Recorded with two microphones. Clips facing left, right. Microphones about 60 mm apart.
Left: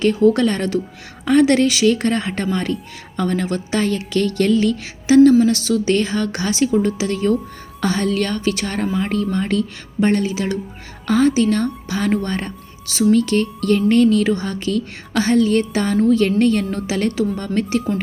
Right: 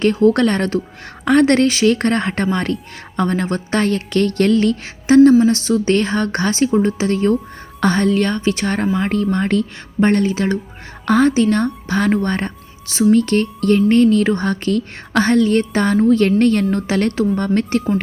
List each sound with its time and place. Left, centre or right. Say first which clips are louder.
0.0 s a woman's voice: right 1 dB; right